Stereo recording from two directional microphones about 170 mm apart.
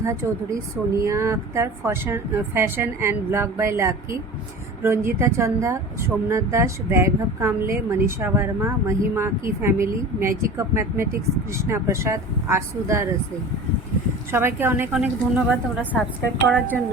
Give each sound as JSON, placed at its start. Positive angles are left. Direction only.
{"t": 0.0, "sound": "speech", "side_deg": -15}
{"t": 14.3, "sound": "speech", "side_deg": -15}
{"t": 16.5, "sound": "a woman's voice", "side_deg": 10}